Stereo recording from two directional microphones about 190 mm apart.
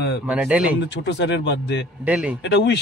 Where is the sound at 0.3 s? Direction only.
5° right (ahead or behind).